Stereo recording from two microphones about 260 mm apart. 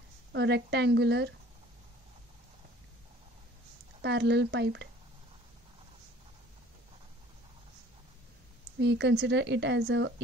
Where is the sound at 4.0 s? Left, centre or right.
Right.